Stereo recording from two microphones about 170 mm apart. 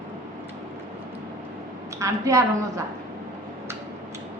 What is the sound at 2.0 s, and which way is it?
Speech, 20° right (ahead or behind).